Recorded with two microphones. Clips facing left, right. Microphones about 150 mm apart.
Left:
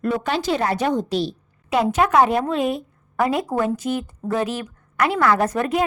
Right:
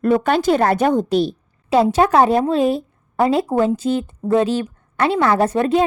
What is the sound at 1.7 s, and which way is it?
A woman's voice, 30° right (ahead or behind).